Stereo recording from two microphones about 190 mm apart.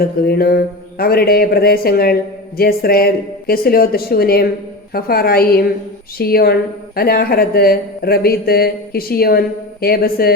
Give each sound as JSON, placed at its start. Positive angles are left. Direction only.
{"t": 0.0, "sound": "a woman's voice", "side_deg": 55}